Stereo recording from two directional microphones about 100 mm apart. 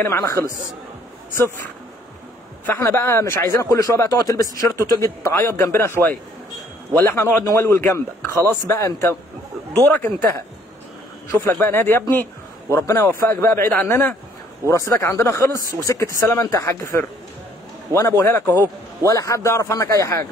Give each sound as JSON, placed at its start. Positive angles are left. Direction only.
{"t": 0.0, "sound": "a man's voice", "side_deg": 25}
{"t": 2.6, "sound": "a man's voice", "side_deg": 20}
{"t": 9.8, "sound": "a man's voice", "side_deg": 20}
{"t": 11.6, "sound": "a man's voice", "side_deg": 25}
{"t": 19.0, "sound": "speech", "side_deg": 35}